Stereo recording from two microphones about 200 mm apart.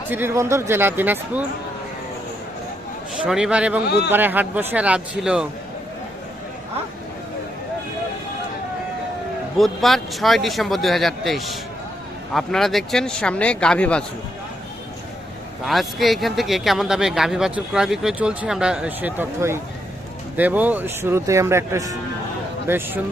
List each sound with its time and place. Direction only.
0.1 s speech: 10° right (ahead or behind)
3.2 s speech: 5° right (ahead or behind)
3.8 s a man's voice: 55° left (ahead or behind)
4.1 s speech: 10° right (ahead or behind)
9.6 s speech: centre (ahead or behind)
15.6 s speech: centre (ahead or behind)